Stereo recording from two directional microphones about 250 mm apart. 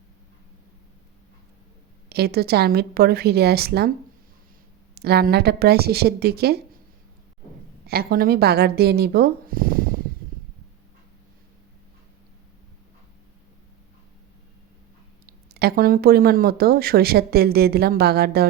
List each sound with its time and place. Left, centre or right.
2.0 s speech: right
4.9 s speech: right
7.9 s speech: right
15.3 s speech: right